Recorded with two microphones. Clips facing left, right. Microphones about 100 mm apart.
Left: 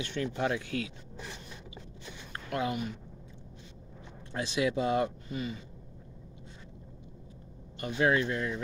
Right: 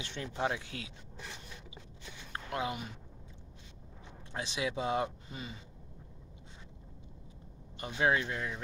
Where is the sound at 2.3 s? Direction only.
20° right (ahead or behind).